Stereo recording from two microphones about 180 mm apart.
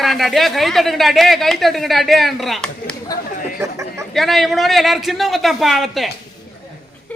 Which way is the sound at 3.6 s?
15° right (ahead or behind).